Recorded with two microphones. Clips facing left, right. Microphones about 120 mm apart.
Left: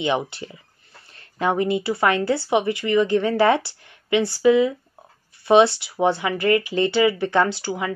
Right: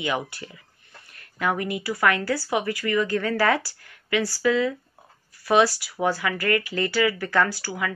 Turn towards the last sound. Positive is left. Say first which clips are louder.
# left 4 dB
turn(degrees=25)  # may be behind; listen again after turning